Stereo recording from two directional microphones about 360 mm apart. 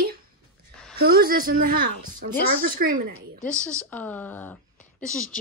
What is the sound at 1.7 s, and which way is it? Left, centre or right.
Speech, right.